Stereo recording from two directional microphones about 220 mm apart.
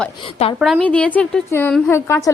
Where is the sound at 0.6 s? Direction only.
Centre (ahead or behind).